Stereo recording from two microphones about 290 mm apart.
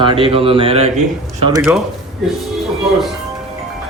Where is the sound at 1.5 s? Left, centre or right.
Centre.